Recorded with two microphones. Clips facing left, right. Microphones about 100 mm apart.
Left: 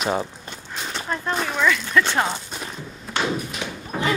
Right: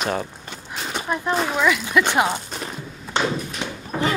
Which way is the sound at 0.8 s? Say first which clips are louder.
Right 3 dB; 10° right (ahead or behind).